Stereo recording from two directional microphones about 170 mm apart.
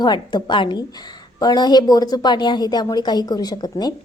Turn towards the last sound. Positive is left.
turn(degrees=25)  # may be behind; listen again after turning